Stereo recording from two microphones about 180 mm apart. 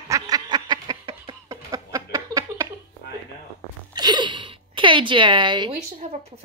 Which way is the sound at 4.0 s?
25° right (ahead or behind).